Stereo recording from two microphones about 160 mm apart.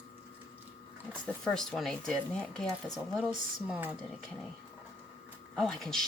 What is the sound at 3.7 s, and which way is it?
Speech, 10° right (ahead or behind).